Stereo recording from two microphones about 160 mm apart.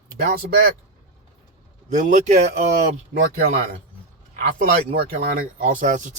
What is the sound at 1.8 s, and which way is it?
Speech, 50° right (ahead or behind).